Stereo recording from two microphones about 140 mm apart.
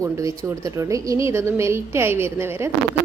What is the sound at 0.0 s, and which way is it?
A woman's voice, 20° right (ahead or behind).